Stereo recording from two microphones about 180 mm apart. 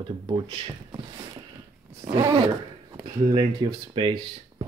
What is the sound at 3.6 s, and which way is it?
Speech, 25° right (ahead or behind).